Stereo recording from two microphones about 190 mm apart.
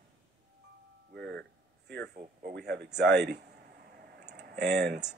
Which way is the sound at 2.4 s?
60° right (ahead or behind).